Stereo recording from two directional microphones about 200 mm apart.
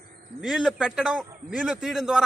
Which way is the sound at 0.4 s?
Centre (ahead or behind).